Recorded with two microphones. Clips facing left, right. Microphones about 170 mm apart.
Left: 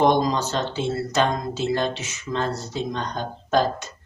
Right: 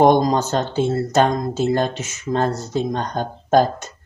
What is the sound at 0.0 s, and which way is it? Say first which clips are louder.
Speech: right 5 dB; 45° right (ahead or behind).